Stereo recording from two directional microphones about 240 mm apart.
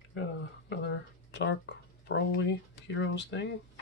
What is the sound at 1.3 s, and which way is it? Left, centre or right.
Speech, left.